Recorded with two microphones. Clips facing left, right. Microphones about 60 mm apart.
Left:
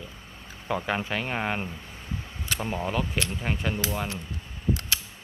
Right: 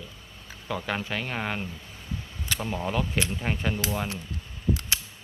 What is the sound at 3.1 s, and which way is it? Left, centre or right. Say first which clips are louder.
Speech: right 1 dB; centre.